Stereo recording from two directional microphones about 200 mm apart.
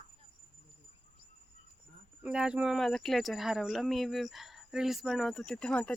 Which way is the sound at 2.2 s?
5° right (ahead or behind).